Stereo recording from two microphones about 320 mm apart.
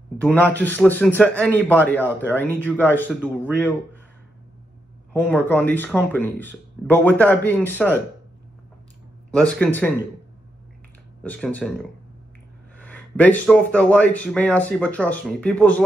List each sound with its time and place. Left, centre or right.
0.2 s speech: centre
5.3 s speech: centre
9.3 s speech: centre
11.2 s speech: centre